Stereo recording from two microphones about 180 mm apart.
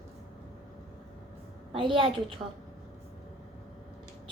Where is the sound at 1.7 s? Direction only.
30° right (ahead or behind).